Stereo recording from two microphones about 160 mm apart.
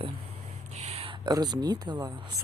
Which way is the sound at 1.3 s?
25° right (ahead or behind).